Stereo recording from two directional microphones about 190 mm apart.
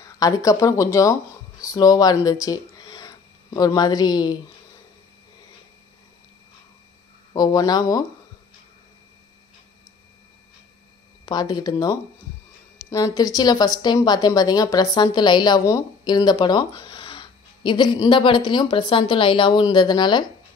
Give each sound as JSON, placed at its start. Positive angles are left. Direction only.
{"t": 0.0, "sound": "speech", "side_deg": 20}
{"t": 7.3, "sound": "speech", "side_deg": 20}
{"t": 11.2, "sound": "speech", "side_deg": 20}